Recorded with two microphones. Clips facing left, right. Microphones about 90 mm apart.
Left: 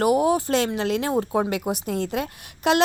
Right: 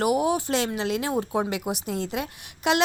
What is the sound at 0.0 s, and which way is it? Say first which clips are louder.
Speech: left 3 dB; 40° left (ahead or behind).